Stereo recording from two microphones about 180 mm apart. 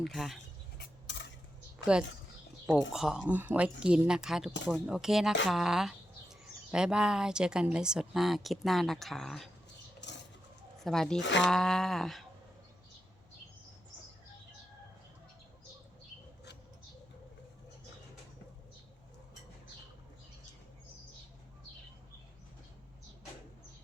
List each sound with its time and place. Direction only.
0.0 s speech: centre (ahead or behind)
0.8 s dishes: 75° left (ahead or behind)
2.9 s speech: 5° right (ahead or behind)
10.0 s bird: 75° left (ahead or behind)
10.8 s speech: centre (ahead or behind)
11.2 s speech: 85° left
11.4 s speech: centre (ahead or behind)